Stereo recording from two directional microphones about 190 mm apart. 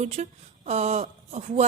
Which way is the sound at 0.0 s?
35° right (ahead or behind).